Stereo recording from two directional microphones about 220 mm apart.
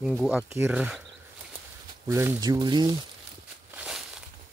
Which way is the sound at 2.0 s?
10° right (ahead or behind).